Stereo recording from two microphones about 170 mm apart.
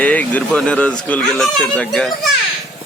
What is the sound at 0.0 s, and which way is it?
Speech, 10° left (ahead or behind).